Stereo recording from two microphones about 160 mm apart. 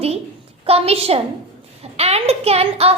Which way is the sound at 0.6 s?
40° right (ahead or behind).